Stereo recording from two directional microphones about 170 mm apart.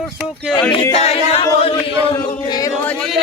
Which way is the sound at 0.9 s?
35° left (ahead or behind).